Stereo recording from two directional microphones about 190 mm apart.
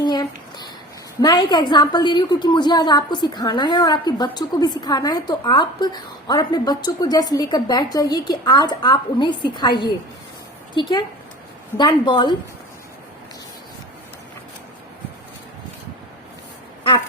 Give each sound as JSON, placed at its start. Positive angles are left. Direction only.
{"t": 0.0, "sound": "a sound", "side_deg": 20}
{"t": 1.2, "sound": "a woman's voice", "side_deg": 20}
{"t": 10.8, "sound": "a woman's voice", "side_deg": 25}